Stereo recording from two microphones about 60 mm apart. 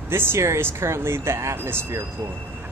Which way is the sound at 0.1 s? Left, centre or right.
Right.